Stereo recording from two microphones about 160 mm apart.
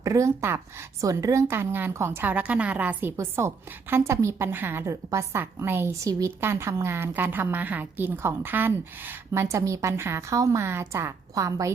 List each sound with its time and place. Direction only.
0.0 s a woman's voice: 20° right (ahead or behind)